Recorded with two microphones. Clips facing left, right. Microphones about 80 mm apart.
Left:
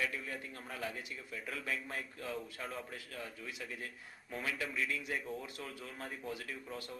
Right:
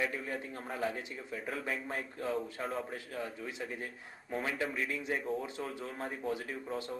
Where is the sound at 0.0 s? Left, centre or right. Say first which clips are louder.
Right 4 dB; right.